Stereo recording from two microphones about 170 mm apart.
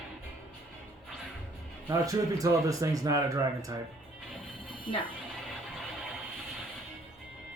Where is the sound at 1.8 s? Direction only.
20° right (ahead or behind).